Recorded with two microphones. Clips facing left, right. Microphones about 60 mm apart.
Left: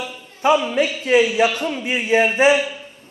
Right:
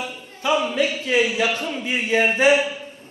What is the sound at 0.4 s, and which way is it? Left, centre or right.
Speech, left.